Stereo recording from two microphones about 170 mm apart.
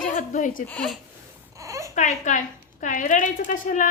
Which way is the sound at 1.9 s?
45° left (ahead or behind).